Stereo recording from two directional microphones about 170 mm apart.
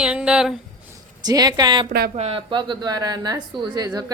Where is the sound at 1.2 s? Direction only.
20° right (ahead or behind).